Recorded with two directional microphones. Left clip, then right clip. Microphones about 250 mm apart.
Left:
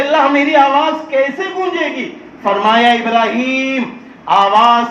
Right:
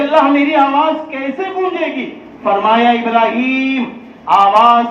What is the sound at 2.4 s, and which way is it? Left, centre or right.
A man's voice, left.